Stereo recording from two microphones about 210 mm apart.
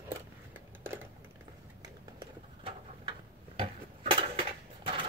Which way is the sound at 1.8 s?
25° right (ahead or behind).